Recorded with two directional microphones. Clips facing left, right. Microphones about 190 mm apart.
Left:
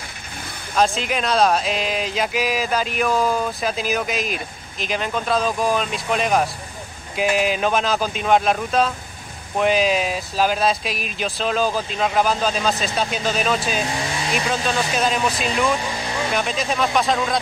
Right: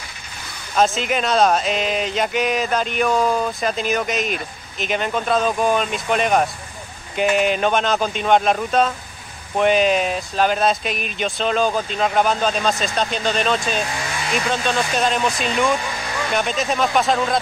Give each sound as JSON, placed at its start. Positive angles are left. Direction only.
{"t": 0.7, "sound": "speech", "side_deg": 0}
{"t": 13.8, "sound": "vehicle", "side_deg": 25}
{"t": 14.3, "sound": "speech", "side_deg": 5}
{"t": 15.8, "sound": "vehicle", "side_deg": 20}
{"t": 16.3, "sound": "speech", "side_deg": 0}